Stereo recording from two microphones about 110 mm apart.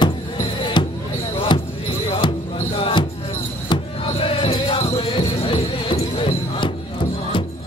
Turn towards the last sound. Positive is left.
turn(degrees=50)  # may be behind; listen again after turning